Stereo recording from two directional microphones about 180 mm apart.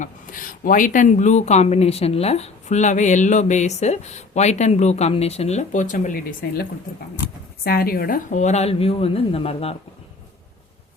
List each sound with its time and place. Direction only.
0.0 s speech: 50° left (ahead or behind)
7.6 s speech: 60° left (ahead or behind); by 9.7 s 35° left (ahead or behind)